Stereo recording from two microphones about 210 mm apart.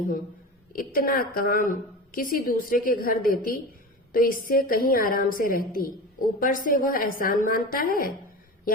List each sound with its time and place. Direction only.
0.7 s a woman's voice: 45° left (ahead or behind)